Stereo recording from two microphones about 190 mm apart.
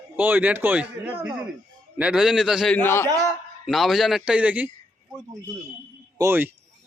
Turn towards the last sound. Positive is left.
turn(degrees=-10)  # may be behind; listen again after turning